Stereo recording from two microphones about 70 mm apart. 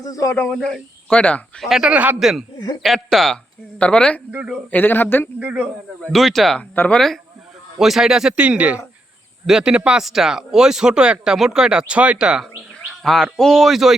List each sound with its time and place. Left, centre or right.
0.0 s speech: left
0.5 s speech: centre
1.6 s speech: centre
1.9 s speech: right
2.1 s speech: centre
3.8 s speech: centre
4.7 s speech: left
5.4 s speech: centre
6.1 s speech: centre
6.6 s speech: centre
7.8 s speech: centre
8.4 s speech: right
9.5 s speech: centre
13.0 s speech: centre